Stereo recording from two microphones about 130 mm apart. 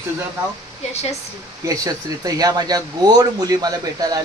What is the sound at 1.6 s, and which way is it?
Speech, 25° right (ahead or behind).